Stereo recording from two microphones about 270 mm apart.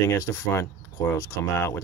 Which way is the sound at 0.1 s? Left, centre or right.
Centre.